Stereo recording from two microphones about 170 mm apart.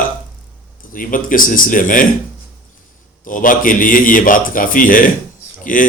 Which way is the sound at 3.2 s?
50° left (ahead or behind).